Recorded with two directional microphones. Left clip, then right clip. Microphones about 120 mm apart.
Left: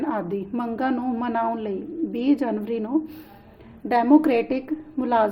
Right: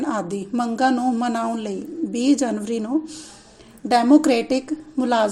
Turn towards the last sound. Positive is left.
turn(degrees=-40)  # may be behind; listen again after turning